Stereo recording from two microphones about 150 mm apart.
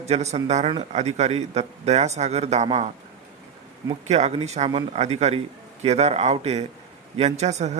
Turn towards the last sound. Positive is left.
turn(degrees=-50)  # may be behind; listen again after turning